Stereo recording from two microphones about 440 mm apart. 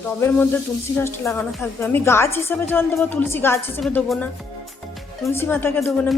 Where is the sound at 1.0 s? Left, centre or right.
Centre.